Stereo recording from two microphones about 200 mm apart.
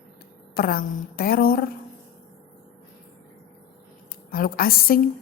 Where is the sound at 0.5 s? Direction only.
50° left (ahead or behind).